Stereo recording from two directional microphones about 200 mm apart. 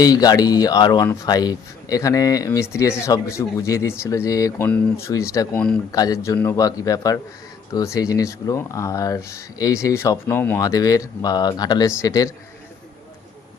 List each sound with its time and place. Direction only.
0.0 s speech: 20° left (ahead or behind)